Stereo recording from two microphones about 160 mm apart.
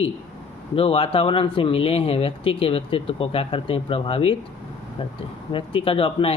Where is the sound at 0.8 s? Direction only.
35° left (ahead or behind).